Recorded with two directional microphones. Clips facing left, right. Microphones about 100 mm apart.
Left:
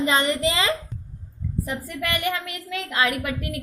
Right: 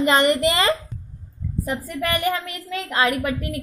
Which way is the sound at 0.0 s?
60° right (ahead or behind).